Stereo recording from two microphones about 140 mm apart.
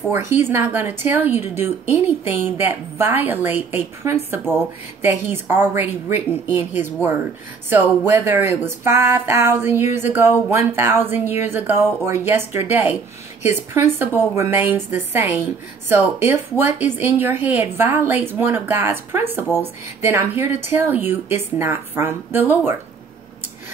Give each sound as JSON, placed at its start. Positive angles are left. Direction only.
{"t": 0.1, "sound": "a woman's voice", "side_deg": -15}